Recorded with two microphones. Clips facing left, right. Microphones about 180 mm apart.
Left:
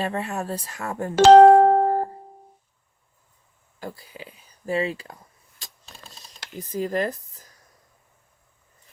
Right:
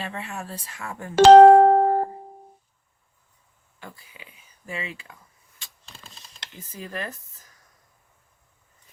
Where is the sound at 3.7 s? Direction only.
35° left (ahead or behind).